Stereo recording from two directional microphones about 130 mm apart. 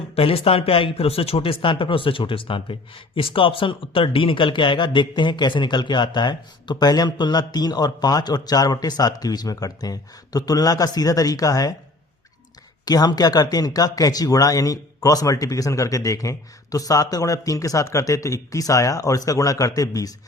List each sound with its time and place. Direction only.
0.2 s speech: 45° left (ahead or behind); by 11.7 s 30° left (ahead or behind)
12.8 s speech: 30° left (ahead or behind)